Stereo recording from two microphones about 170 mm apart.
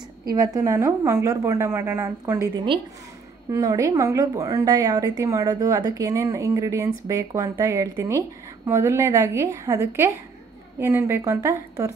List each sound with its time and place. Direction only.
0.3 s a woman's voice: 20° right (ahead or behind)